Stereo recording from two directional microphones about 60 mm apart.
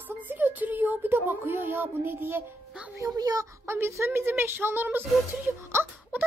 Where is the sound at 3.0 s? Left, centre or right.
Right.